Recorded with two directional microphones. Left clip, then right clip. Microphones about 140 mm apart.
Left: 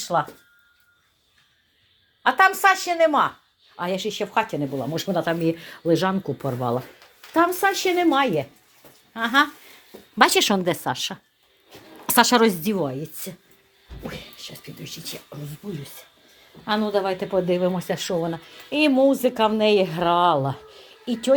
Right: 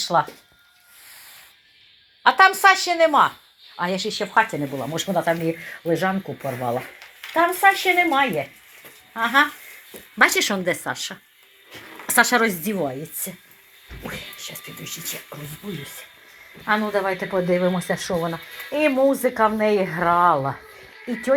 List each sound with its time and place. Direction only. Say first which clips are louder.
0.1 s speech: right 3 dB; 5° left (ahead or behind)
2.2 s speech: right 3 dB; 15° left (ahead or behind)
4.9 s speech: right 3 dB; 40° left (ahead or behind); by 7.8 s 90° left
9.1 s speech: right 2 dB; 40° left (ahead or behind)
10.2 s speech: even; 55° left (ahead or behind)
12.0 s speech: left 1 dB; 55° left (ahead or behind)
12.8 s speech: right 1 dB; 35° left (ahead or behind)
14.1 s speech: right 5 dB; 25° left (ahead or behind)
16.6 s speech: right 1 dB; 20° left (ahead or behind)
21.1 s speech: left 1 dB; 35° left (ahead or behind)